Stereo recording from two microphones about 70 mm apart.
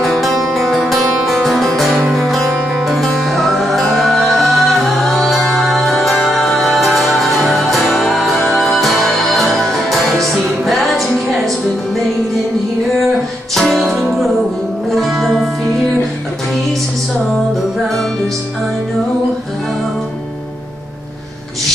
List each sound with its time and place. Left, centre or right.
0.0 s music: centre
13.6 s music: centre
17.3 s music: centre